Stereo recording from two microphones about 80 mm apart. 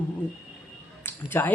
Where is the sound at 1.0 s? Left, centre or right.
Left.